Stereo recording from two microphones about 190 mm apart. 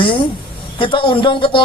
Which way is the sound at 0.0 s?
25° left (ahead or behind).